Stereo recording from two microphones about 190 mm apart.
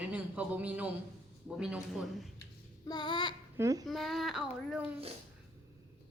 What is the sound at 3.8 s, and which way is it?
Speech, centre (ahead or behind).